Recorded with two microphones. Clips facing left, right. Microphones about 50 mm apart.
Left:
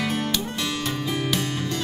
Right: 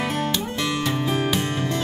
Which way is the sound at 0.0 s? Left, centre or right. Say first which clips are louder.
Right 1 dB; right.